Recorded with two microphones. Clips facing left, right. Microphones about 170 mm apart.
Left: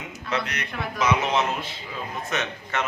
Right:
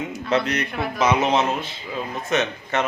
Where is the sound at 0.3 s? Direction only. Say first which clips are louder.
Right 7 dB; 30° right (ahead or behind).